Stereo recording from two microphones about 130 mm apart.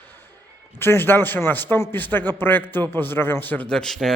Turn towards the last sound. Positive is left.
turn(degrees=5)  # may be behind; listen again after turning